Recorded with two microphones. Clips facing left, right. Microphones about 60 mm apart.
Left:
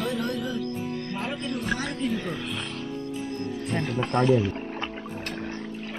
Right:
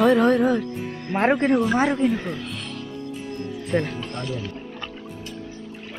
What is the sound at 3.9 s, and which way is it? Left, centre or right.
Speech, left.